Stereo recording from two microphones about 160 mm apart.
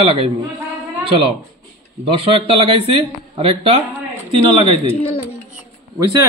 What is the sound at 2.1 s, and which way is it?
Speech, 35° right (ahead or behind).